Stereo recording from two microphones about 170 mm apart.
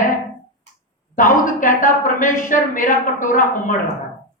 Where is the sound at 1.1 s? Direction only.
50° left (ahead or behind).